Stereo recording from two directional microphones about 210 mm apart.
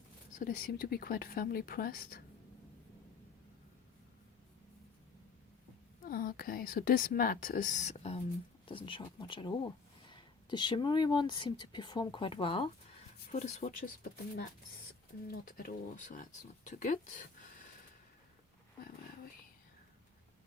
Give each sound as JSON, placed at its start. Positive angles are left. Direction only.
{"t": 0.3, "sound": "speech", "side_deg": 40}
{"t": 6.1, "sound": "speech", "side_deg": 45}
{"t": 15.4, "sound": "speech", "side_deg": 45}